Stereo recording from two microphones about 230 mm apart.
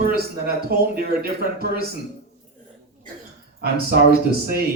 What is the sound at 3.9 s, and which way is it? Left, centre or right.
Music, right.